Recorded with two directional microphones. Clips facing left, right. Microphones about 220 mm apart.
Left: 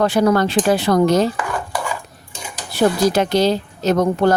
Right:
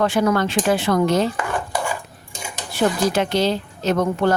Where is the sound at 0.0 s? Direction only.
35° left (ahead or behind).